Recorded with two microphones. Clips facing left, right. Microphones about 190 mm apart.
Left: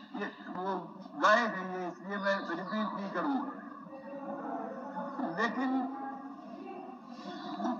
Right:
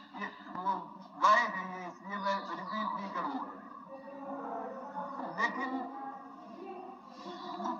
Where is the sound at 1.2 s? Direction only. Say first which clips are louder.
Left 3 dB; 65° left (ahead or behind).